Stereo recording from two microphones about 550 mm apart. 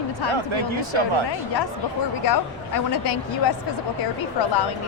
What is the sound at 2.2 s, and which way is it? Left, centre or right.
Speech, left.